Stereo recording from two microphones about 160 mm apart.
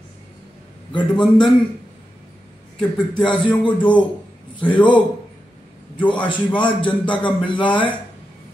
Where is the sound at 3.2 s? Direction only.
30° left (ahead or behind).